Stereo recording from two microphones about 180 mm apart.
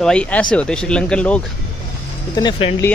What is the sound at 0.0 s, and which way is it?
Speech, 5° left (ahead or behind).